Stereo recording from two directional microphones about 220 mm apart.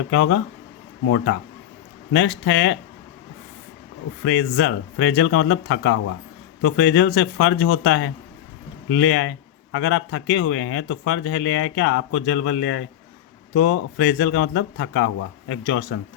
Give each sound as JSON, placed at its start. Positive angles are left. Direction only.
{"t": 0.1, "sound": "speech", "side_deg": 55}
{"t": 4.2, "sound": "speech", "side_deg": 55}
{"t": 13.5, "sound": "speech", "side_deg": 60}